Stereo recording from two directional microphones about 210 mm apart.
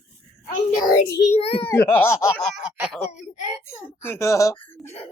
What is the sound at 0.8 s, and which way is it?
Speech, 35° left (ahead or behind).